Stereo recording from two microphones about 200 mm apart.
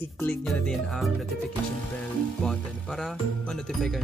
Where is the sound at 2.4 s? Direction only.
5° left (ahead or behind).